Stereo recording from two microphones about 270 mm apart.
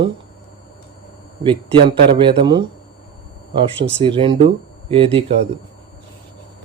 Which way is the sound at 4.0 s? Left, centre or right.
Centre.